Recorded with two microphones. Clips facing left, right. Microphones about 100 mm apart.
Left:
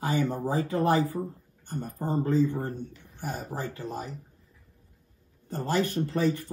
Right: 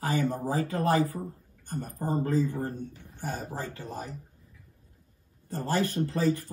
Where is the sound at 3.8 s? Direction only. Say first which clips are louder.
Left 3 dB; 20° left (ahead or behind).